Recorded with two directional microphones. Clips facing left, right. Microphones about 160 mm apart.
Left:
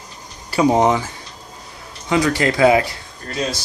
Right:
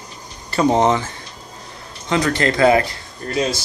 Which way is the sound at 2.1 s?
10° left (ahead or behind).